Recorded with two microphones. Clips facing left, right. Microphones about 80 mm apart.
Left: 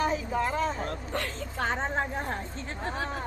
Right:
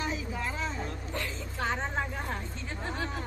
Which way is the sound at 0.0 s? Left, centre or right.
Left.